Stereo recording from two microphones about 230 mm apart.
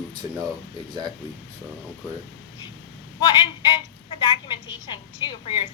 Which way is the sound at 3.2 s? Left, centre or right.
Centre.